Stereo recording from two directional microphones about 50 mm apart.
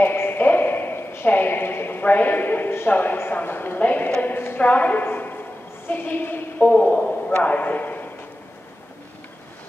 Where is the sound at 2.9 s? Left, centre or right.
Left.